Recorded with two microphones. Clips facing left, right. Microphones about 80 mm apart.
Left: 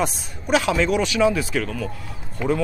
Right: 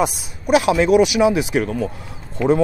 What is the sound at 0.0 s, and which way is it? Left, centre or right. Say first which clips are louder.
A man's voice: right 4 dB; centre.